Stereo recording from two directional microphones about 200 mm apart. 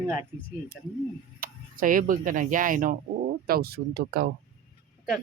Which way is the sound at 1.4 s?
45° right (ahead or behind).